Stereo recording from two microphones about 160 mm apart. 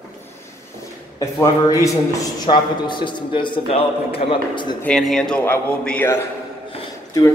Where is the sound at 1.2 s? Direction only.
20° left (ahead or behind).